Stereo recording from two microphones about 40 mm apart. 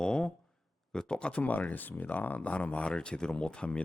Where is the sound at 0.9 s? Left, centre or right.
Left.